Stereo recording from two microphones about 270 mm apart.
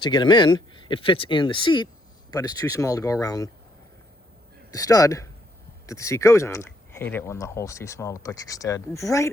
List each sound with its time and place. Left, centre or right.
0.0 s speech: centre
4.7 s speech: centre